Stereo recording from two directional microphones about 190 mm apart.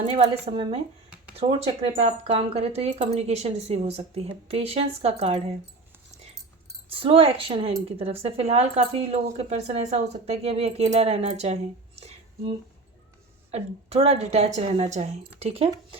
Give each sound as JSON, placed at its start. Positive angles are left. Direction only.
{"t": 0.0, "sound": "speech", "side_deg": -30}
{"t": 6.9, "sound": "speech", "side_deg": -30}
{"t": 11.9, "sound": "a sound", "side_deg": -30}
{"t": 13.5, "sound": "speech", "side_deg": -35}